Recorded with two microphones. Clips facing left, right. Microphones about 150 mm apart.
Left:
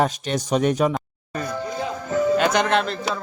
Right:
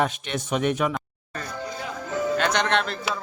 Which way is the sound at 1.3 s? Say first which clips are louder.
Left 6 dB; 15° left (ahead or behind).